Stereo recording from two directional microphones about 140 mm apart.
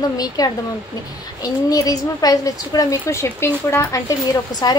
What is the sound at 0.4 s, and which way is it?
A woman's voice, 30° left (ahead or behind).